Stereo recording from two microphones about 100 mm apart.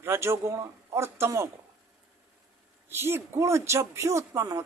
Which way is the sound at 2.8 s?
25° right (ahead or behind).